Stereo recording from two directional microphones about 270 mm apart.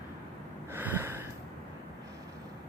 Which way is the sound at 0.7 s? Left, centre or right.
Centre.